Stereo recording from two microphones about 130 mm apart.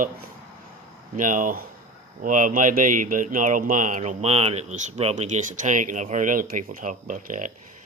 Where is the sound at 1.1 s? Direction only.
90° right.